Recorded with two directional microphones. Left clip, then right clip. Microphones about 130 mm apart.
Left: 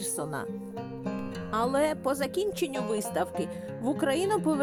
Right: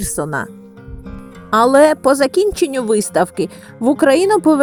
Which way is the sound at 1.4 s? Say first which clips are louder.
Right 17 dB; 50° right (ahead or behind).